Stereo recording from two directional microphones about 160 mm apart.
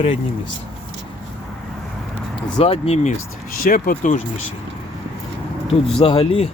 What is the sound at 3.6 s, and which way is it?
Speech, 60° left (ahead or behind).